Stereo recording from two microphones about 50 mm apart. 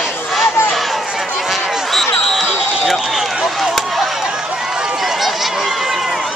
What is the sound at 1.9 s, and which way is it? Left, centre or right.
Music, centre.